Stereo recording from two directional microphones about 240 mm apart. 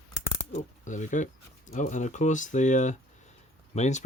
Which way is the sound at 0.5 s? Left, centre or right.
Left.